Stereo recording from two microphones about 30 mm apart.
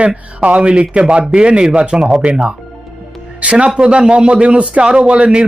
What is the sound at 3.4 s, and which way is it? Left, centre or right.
A man's voice, right.